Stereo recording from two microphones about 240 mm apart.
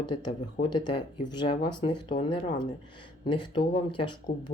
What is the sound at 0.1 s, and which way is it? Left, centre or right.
Speech, left.